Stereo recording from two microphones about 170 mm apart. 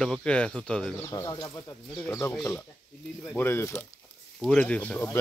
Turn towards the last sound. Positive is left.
turn(degrees=5)  # may be behind; listen again after turning